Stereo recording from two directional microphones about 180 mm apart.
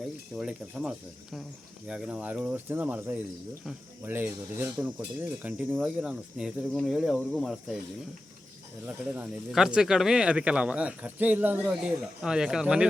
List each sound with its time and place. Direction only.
0.3 s speech: 5° right (ahead or behind)
8.9 s speech: 5° right (ahead or behind)